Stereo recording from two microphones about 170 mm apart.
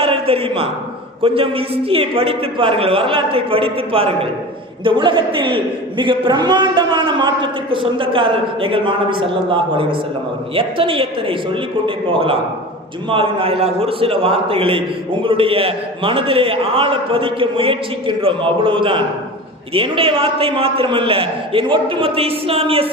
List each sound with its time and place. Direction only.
0.0 s a sound: 35° right (ahead or behind)
1.4 s a man's voice: 35° right (ahead or behind)
13.1 s a man's voice: 30° right (ahead or behind)